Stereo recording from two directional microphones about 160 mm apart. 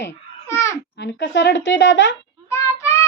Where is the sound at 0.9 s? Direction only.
90° left.